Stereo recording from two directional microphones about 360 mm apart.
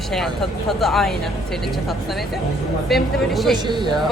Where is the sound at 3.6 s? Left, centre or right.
Centre.